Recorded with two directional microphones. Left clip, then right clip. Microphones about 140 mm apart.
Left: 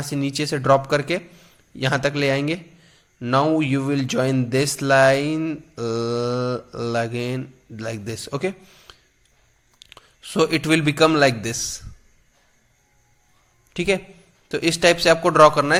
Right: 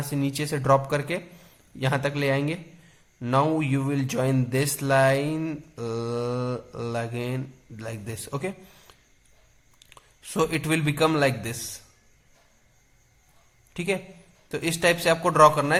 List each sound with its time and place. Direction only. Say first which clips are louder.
0.0 s a man's voice: left 4 dB; 15° left (ahead or behind)
3.2 s speech: left 5 dB; 5° left (ahead or behind)
3.6 s a man's voice: left 5 dB; 15° left (ahead or behind)
8.6 s a sound: left 3 dB; 5° left (ahead or behind)
9.7 s a man's voice: left 6 dB; 15° left (ahead or behind)
13.7 s a man's voice: left 6 dB; 20° left (ahead or behind)